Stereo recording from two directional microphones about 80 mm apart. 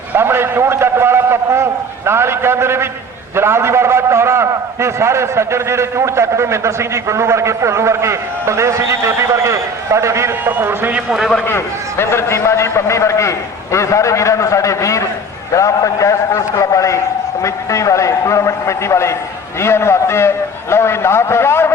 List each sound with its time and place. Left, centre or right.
0.1 s a man's voice: right
10.9 s a man's voice: centre
11.4 s a man's voice: left